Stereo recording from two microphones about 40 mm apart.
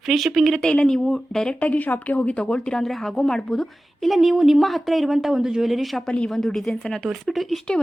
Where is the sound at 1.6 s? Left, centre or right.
Left.